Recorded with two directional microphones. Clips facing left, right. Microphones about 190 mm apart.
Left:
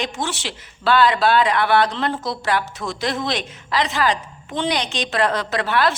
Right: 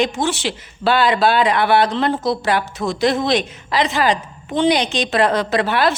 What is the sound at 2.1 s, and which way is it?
Speech, 30° right (ahead or behind).